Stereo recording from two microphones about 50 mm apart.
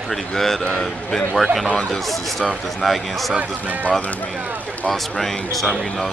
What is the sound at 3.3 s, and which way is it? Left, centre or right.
Speech, right.